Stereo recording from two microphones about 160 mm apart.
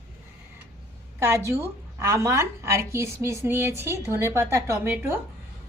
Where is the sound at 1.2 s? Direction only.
15° right (ahead or behind).